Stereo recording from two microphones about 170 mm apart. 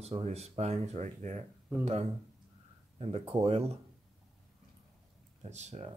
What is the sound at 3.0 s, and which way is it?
Speech, 35° right (ahead or behind).